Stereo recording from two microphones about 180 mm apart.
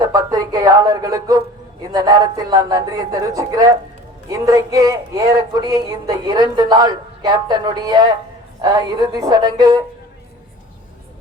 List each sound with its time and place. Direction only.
0.0 s speech: 20° right (ahead or behind)